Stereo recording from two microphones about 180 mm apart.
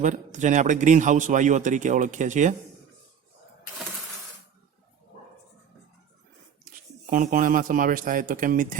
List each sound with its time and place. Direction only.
0.0 s a man's voice: 45° right (ahead or behind)
7.1 s a man's voice: 50° right (ahead or behind)